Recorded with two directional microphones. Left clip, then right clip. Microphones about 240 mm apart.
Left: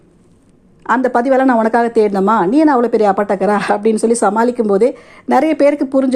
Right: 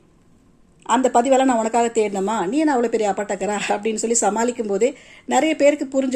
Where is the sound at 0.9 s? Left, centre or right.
Centre.